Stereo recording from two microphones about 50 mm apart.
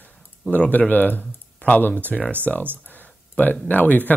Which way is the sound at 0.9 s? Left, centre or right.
Left.